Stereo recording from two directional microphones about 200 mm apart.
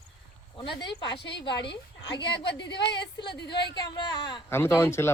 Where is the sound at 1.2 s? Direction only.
60° left (ahead or behind).